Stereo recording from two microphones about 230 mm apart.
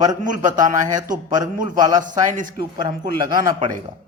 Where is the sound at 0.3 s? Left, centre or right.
Right.